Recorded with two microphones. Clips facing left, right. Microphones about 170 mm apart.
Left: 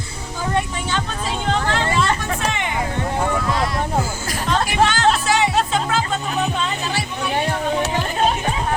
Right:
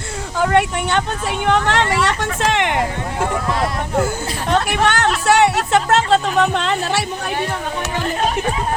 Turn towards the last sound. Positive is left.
turn(degrees=-75)  # may be behind; listen again after turning